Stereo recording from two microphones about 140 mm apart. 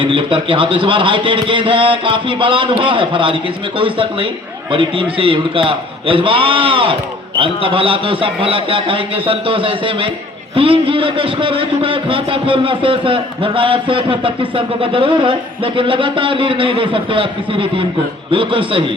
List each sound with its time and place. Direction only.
0.0 s a man's voice: 40° right (ahead or behind)